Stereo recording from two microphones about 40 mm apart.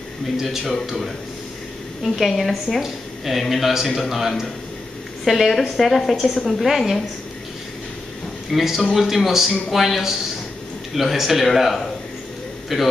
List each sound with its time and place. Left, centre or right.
0.4 s a woman's voice: centre
8.5 s a woman's voice: centre